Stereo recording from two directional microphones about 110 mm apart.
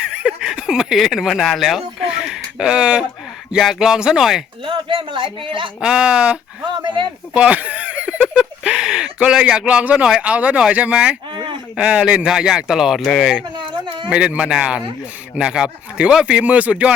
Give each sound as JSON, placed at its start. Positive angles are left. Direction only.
{"t": 0.0, "sound": "a sound", "side_deg": -10}
{"t": 3.5, "sound": "speech", "side_deg": 0}
{"t": 4.6, "sound": "a man's voice", "side_deg": -50}
{"t": 5.8, "sound": "a man's voice", "side_deg": -10}
{"t": 6.8, "sound": "a man's voice", "side_deg": -45}
{"t": 7.3, "sound": "a sound", "side_deg": -10}
{"t": 8.4, "sound": "speech", "side_deg": -5}
{"t": 13.6, "sound": "a sound", "side_deg": -45}
{"t": 14.1, "sound": "a man's voice", "side_deg": -10}